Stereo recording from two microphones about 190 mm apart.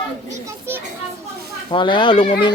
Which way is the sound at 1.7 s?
25° left (ahead or behind).